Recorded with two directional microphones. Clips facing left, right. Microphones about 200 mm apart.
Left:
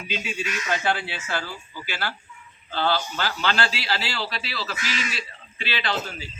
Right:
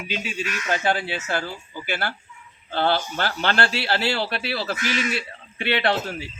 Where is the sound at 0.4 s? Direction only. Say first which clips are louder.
Right 2 dB; 55° right (ahead or behind).